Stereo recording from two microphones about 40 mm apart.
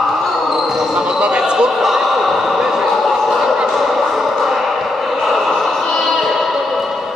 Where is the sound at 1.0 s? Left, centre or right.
Right.